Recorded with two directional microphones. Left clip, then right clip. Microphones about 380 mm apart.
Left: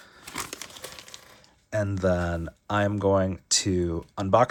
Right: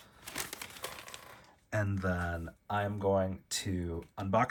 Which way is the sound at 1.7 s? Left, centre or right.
Centre.